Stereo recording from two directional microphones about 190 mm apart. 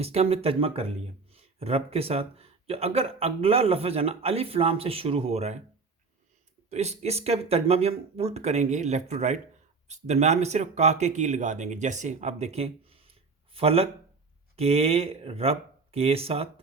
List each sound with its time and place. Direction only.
0.0 s speech: 35° right (ahead or behind)
6.7 s speech: 35° right (ahead or behind)